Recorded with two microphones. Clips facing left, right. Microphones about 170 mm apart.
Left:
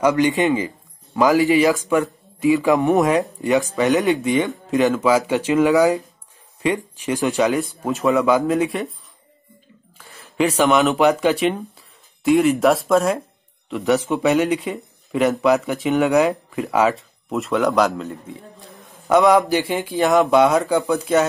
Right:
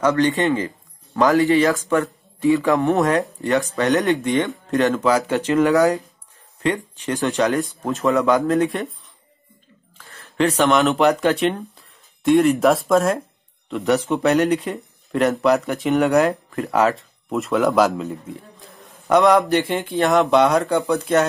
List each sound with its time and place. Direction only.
0.0 s speech: 15° left (ahead or behind)
0.7 s music: 5° left (ahead or behind)
1.4 s speech: 15° left (ahead or behind)
10.2 s speech: 5° left (ahead or behind)